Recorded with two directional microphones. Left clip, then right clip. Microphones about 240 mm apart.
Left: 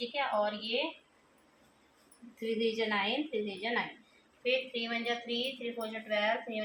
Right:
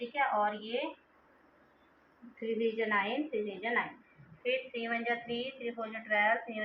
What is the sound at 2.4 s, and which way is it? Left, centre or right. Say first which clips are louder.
A woman's voice: even; left.